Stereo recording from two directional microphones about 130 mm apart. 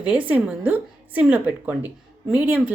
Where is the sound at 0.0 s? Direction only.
10° right (ahead or behind).